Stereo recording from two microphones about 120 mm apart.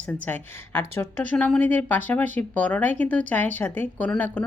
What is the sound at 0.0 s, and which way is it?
A woman's voice, 15° left (ahead or behind).